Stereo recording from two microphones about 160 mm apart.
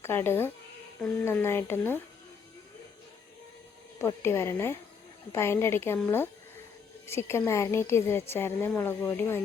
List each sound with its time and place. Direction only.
0.0 s a woman's voice: 15° left (ahead or behind)
3.9 s a woman's voice: 15° left (ahead or behind)
7.2 s a woman's voice: 15° left (ahead or behind)